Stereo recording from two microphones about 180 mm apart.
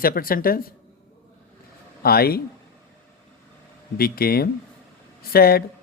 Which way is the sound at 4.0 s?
55° left (ahead or behind).